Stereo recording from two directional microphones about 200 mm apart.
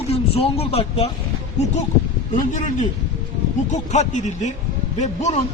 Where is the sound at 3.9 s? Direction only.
35° left (ahead or behind).